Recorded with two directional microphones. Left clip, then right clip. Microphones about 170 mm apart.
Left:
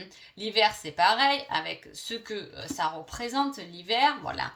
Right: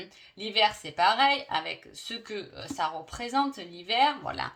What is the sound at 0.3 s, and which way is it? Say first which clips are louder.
Speech: left 1 dB; 35° right (ahead or behind).